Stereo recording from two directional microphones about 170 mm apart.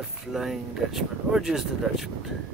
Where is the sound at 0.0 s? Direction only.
Centre (ahead or behind).